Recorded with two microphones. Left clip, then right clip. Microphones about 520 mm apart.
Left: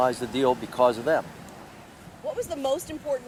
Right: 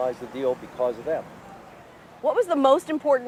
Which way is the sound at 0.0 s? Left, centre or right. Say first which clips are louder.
Left 3 dB; left.